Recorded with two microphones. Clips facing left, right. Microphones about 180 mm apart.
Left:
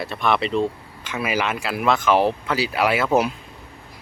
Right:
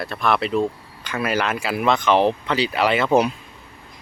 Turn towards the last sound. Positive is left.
turn(degrees=5)  # may be behind; listen again after turning